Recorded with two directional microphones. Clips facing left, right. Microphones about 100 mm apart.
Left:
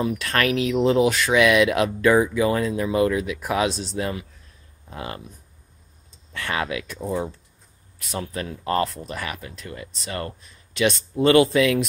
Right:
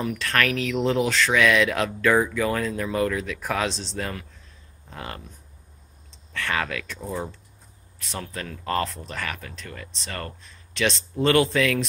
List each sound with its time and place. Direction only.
0.0 s speech: 20° left (ahead or behind)
6.3 s speech: 15° left (ahead or behind)